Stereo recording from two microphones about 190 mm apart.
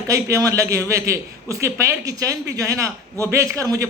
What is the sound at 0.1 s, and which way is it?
A man's voice, 15° right (ahead or behind).